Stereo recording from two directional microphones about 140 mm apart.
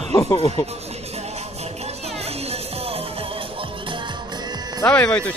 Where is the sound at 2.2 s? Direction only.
45° right (ahead or behind).